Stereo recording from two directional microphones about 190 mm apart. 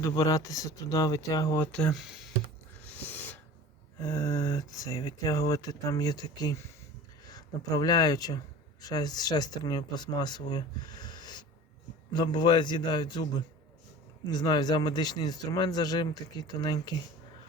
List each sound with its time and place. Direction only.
0.0 s speech: 15° left (ahead or behind); by 2.3 s centre (ahead or behind)
2.8 s a sound: 10° left (ahead or behind)
4.0 s speech: 15° left (ahead or behind)
14.3 s speech: 20° left (ahead or behind)